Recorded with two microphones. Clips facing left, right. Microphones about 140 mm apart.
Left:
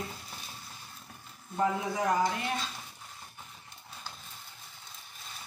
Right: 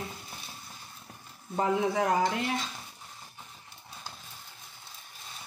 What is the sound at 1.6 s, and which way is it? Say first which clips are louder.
Speech: right 3 dB; 70° right (ahead or behind).